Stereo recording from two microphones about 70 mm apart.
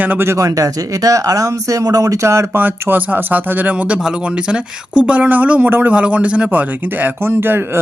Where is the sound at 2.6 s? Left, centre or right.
Right.